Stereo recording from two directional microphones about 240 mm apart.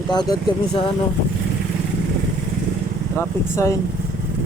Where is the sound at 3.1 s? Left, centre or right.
Centre.